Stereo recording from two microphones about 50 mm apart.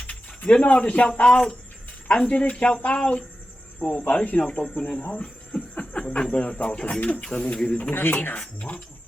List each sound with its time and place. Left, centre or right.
0.1 s speech: left
1.2 s a man's voice: centre
5.1 s a sound: centre
6.3 s speech: left
7.8 s a man's voice: left
8.4 s speech: left